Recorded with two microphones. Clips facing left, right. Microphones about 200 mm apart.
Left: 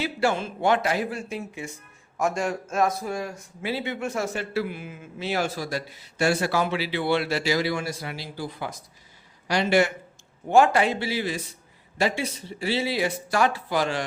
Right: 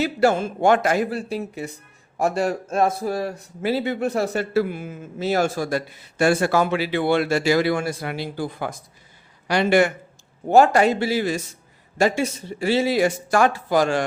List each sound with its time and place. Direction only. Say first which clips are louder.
0.0 s speech: right 6 dB; 45° right (ahead or behind)
10.5 s speech: right 4 dB; 40° right (ahead or behind)